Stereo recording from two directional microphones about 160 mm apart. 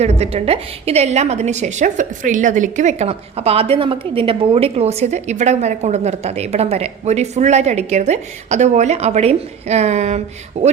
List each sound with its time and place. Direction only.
0.0 s a woman's voice: 40° right (ahead or behind)